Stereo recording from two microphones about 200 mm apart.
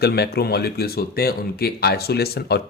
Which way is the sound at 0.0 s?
50° left (ahead or behind).